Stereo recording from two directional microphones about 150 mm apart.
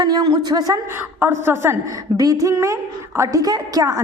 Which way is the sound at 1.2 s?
15° right (ahead or behind).